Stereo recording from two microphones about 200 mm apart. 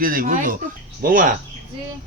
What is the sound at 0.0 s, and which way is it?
A man's voice, 45° right (ahead or behind).